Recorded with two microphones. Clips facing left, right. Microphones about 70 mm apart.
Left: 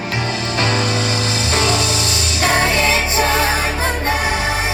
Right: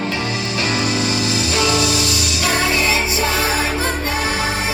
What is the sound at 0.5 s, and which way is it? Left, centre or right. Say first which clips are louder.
Music: left 1 dB; left.